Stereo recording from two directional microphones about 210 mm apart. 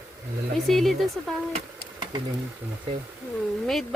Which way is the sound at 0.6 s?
Centre (ahead or behind).